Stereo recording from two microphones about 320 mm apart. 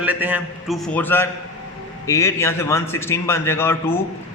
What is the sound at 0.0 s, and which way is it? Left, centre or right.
A man's voice, centre.